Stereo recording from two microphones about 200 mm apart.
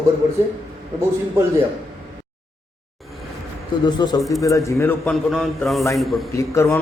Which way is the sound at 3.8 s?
20° left (ahead or behind).